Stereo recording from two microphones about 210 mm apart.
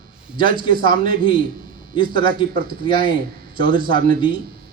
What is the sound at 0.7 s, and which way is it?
Speech, 45° right (ahead or behind).